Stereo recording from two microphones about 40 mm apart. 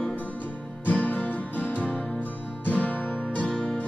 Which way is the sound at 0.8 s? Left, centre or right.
Left.